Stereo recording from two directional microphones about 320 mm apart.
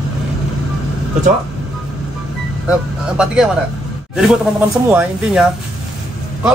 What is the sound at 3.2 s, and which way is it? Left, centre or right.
A man's voice, centre.